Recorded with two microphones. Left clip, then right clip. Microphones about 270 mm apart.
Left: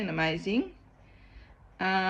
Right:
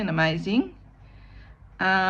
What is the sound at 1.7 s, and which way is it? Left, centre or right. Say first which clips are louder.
Speech: right 6 dB; right.